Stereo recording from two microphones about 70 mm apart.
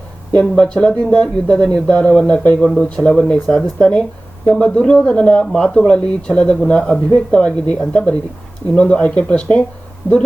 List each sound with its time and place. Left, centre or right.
0.3 s speech: centre